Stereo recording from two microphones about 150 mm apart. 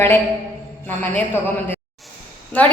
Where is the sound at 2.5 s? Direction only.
10° left (ahead or behind).